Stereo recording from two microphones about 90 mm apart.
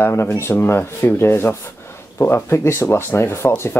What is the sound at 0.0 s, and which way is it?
Speech, 30° left (ahead or behind).